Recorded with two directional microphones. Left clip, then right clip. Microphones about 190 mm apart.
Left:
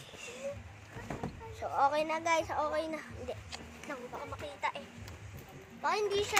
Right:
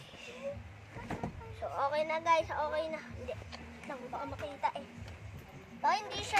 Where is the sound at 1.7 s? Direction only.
30° left (ahead or behind).